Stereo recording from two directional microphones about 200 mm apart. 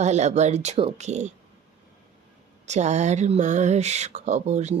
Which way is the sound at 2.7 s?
35° right (ahead or behind).